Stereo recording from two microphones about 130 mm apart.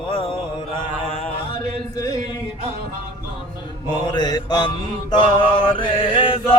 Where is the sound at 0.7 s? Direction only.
40° left (ahead or behind).